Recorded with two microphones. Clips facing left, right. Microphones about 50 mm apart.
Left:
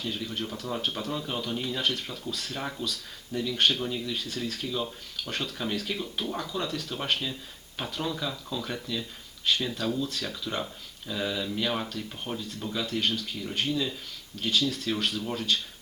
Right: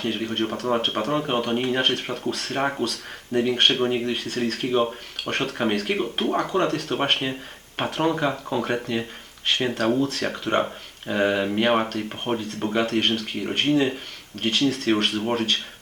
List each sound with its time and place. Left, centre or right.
0.0 s speech: right